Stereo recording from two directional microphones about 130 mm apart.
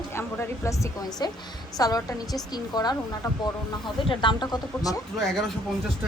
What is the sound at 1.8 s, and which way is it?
A woman's voice, 30° left (ahead or behind).